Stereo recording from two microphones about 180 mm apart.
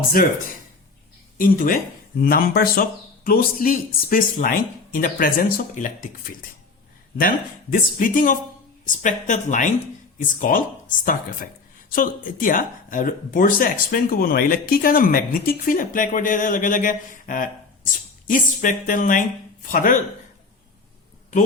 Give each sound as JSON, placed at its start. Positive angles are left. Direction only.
{"t": 0.2, "sound": "speech", "side_deg": 50}
{"t": 1.4, "sound": "speech", "side_deg": 50}
{"t": 7.2, "sound": "speech", "side_deg": 50}